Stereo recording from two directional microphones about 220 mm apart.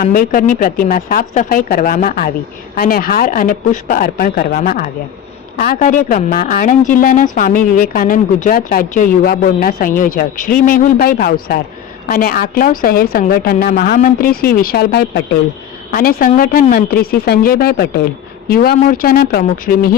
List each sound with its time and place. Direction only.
0.0 s speech: 40° left (ahead or behind)